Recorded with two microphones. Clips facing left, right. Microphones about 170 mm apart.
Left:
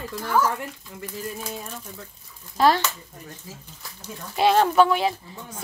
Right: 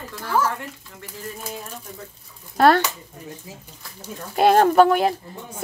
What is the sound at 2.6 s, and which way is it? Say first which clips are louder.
Speech: right 3 dB; 55° right (ahead or behind).